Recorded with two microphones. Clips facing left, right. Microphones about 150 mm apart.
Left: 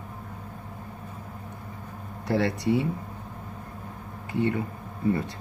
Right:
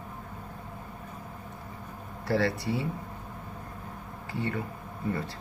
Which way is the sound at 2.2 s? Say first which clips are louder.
Left 3 dB; 20° left (ahead or behind).